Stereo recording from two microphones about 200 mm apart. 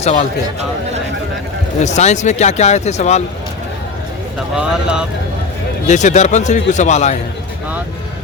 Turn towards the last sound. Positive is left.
turn(degrees=35)  # may be behind; listen again after turning